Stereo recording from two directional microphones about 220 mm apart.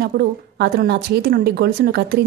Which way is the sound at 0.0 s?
45° right (ahead or behind).